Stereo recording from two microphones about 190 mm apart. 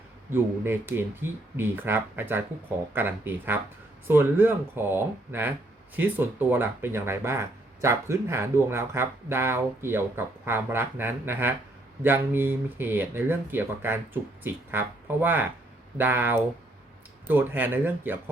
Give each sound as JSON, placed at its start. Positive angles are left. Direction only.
{"t": 0.3, "sound": "speech", "side_deg": -10}